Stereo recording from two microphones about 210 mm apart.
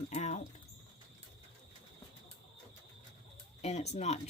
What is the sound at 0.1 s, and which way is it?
Rodents, 35° left (ahead or behind).